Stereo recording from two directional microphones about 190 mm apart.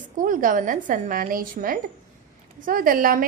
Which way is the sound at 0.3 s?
45° right (ahead or behind).